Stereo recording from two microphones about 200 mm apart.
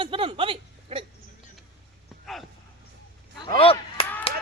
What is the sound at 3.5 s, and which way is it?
Whip, 30° left (ahead or behind).